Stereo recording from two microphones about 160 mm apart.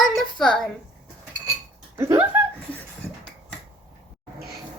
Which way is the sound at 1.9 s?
15° right (ahead or behind).